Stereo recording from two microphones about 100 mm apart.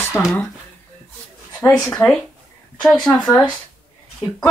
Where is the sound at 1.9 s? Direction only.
15° left (ahead or behind).